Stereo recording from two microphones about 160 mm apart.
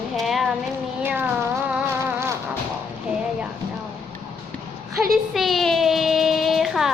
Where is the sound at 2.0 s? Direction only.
15° right (ahead or behind).